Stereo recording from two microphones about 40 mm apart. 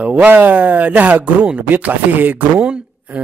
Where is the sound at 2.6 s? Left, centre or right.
Right.